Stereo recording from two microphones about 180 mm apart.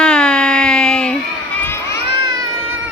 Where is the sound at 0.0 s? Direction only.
5° left (ahead or behind).